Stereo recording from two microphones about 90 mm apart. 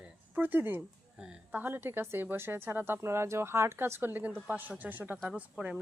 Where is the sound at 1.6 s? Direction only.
25° right (ahead or behind).